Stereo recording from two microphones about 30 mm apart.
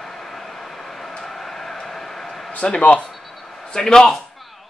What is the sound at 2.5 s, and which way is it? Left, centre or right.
Speech, left.